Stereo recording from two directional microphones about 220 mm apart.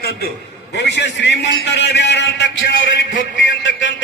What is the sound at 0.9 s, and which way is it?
A man's voice, 55° left (ahead or behind).